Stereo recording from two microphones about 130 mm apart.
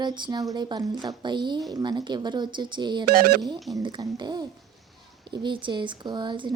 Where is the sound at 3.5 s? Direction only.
Centre (ahead or behind).